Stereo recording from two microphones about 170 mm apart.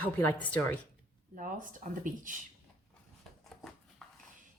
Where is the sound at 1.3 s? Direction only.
50° right (ahead or behind).